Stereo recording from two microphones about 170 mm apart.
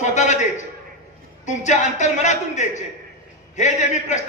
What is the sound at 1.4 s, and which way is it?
A man's voice, 45° left (ahead or behind).